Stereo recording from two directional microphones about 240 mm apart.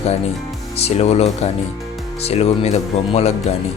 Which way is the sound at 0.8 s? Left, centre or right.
Left.